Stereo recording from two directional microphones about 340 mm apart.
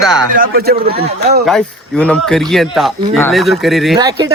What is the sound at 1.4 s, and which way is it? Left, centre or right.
A man's voice, centre.